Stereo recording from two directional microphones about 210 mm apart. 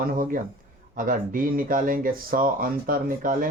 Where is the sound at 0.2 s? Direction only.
40° right (ahead or behind).